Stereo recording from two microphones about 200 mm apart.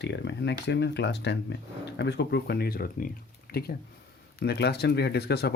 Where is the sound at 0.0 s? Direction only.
60° left (ahead or behind).